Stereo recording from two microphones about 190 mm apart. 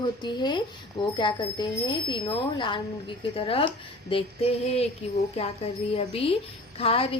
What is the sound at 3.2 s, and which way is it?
Speech, 30° left (ahead or behind).